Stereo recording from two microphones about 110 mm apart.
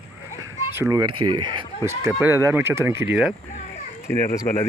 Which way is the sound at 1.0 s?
45° right (ahead or behind).